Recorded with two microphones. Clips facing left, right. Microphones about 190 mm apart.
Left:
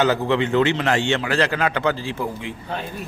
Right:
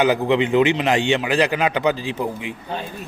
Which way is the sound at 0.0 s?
15° right (ahead or behind).